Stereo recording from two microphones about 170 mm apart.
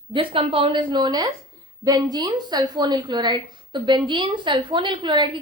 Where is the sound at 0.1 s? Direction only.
30° right (ahead or behind).